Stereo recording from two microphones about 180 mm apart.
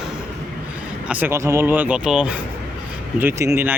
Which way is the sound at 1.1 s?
10° right (ahead or behind).